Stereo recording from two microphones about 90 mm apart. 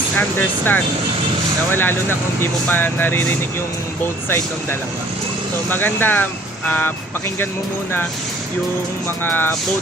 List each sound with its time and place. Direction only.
0.2 s speech: 20° left (ahead or behind)
5.6 s speech: 20° left (ahead or behind)
9.2 s speech: 25° left (ahead or behind)